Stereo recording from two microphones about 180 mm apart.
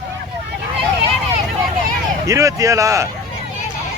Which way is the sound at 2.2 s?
20° right (ahead or behind).